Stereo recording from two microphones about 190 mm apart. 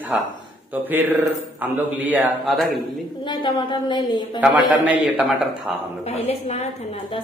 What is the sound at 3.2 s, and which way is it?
Speech, 25° left (ahead or behind).